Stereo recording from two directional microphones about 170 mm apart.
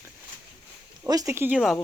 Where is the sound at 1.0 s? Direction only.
20° right (ahead or behind); by 1.8 s 5° right (ahead or behind).